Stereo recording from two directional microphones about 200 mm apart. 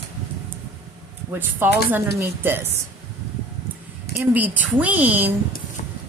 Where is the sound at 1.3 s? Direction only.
10° right (ahead or behind).